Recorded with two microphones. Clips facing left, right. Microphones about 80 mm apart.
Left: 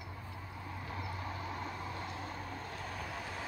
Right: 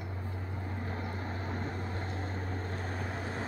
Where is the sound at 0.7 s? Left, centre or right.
Right.